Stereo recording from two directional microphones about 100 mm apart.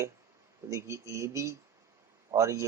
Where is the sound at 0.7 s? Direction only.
30° right (ahead or behind).